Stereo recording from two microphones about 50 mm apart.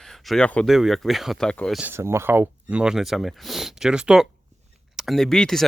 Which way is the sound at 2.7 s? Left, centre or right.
Right.